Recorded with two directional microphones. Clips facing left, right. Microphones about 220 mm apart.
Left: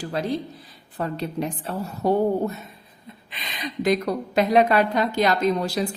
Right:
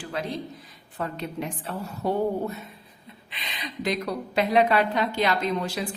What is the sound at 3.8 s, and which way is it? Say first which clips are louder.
A woman's voice: left 6 dB; 45° left (ahead or behind).